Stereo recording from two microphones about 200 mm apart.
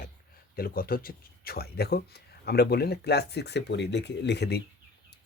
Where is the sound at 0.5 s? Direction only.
45° left (ahead or behind).